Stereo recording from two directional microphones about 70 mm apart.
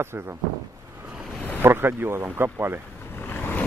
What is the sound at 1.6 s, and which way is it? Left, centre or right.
Speech, right.